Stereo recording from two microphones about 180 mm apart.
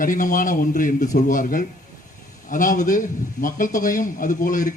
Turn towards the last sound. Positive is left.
turn(degrees=45)  # may be behind; listen again after turning